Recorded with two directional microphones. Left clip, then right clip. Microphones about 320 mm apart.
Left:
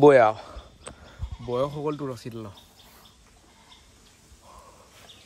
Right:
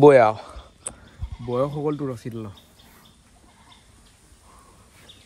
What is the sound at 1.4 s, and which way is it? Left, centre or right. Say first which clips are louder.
Speech: right 3 dB; right.